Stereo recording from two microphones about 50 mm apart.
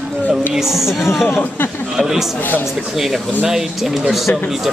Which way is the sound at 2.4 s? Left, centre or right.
Left.